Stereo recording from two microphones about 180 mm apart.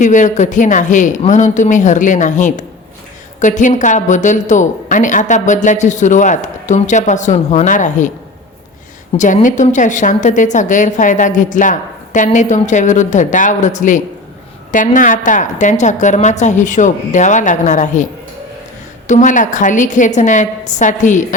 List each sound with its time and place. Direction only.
0.0 s a woman's voice: 45° left (ahead or behind)
9.1 s a woman's voice: 45° left (ahead or behind)